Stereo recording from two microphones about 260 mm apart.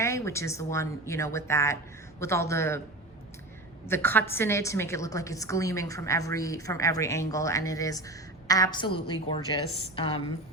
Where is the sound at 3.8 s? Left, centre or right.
Centre.